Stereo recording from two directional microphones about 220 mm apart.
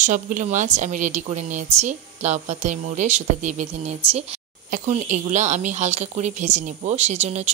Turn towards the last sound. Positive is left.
turn(degrees=-30)  # may be behind; listen again after turning